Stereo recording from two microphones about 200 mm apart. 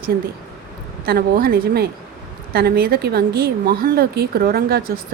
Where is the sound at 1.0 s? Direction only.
50° right (ahead or behind).